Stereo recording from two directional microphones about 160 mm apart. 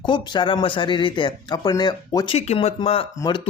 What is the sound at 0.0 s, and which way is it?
Speech, 30° left (ahead or behind).